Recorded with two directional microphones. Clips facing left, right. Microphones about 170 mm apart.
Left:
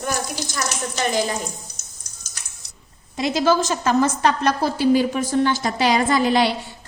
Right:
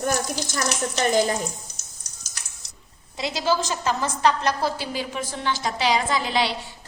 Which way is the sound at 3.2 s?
50° left (ahead or behind).